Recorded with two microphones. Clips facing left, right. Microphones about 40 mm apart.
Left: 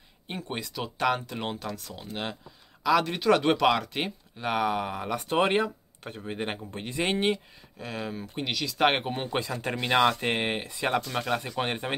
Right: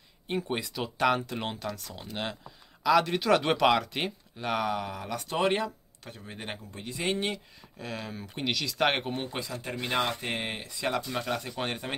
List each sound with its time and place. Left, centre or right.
0.3 s speech: centre
4.5 s speech: centre
6.7 s speech: left
7.8 s speech: centre
8.8 s speech: centre
9.4 s speech: left
10.2 s speech: left
11.1 s speech: left